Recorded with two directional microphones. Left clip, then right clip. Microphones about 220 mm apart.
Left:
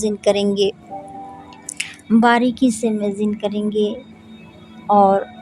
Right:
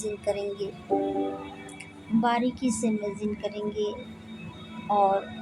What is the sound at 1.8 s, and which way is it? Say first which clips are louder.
A woman's voice: left 12 dB; 45° left (ahead or behind).